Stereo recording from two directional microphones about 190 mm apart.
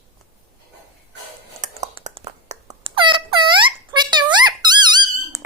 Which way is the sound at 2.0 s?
35° right (ahead or behind).